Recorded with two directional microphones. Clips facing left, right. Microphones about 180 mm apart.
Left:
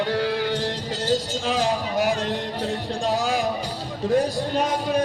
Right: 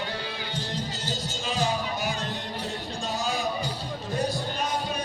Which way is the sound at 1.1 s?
90° left.